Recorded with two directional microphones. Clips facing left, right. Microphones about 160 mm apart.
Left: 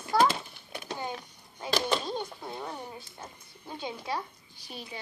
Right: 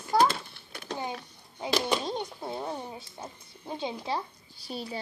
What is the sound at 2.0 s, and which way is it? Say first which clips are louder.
Speech: right 2 dB; 25° right (ahead or behind).